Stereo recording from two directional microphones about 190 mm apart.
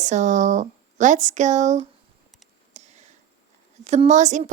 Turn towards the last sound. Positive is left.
turn(degrees=-40)  # may be behind; listen again after turning